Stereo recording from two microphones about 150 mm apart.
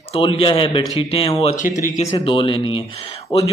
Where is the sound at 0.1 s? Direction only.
35° left (ahead or behind).